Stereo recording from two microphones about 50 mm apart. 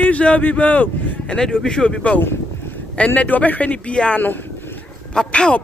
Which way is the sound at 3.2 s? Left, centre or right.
Left.